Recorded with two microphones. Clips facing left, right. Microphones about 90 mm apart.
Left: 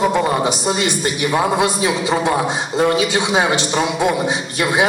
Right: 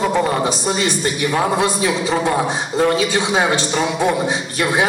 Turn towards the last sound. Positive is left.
turn(degrees=20)  # may be behind; listen again after turning